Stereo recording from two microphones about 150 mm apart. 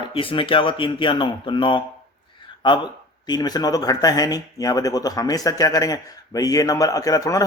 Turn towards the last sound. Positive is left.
turn(degrees=25)  # may be behind; listen again after turning